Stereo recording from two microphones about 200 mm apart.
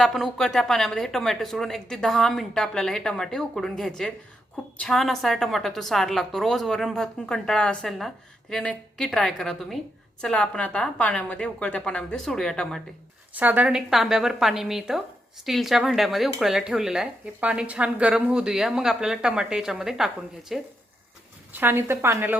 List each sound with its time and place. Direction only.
0.0 s a woman's voice: centre (ahead or behind)
13.3 s a woman's voice: 10° right (ahead or behind)